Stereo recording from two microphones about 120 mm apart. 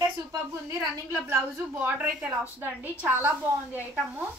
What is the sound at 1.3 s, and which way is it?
A woman's voice, 20° right (ahead or behind).